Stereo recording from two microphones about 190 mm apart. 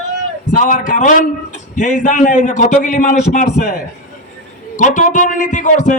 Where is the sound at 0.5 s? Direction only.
40° left (ahead or behind).